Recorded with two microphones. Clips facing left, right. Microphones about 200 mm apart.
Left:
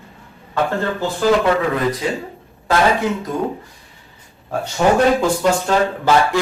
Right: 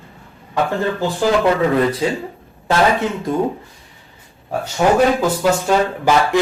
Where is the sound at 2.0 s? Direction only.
30° right (ahead or behind).